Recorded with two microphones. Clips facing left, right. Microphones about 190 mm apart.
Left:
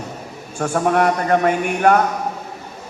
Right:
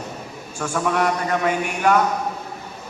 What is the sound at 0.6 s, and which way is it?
A man's voice, 50° left (ahead or behind).